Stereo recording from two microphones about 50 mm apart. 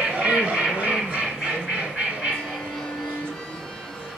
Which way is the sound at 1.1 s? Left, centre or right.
Centre.